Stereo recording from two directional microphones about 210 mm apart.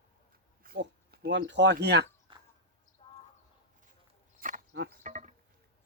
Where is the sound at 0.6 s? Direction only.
45° right (ahead or behind).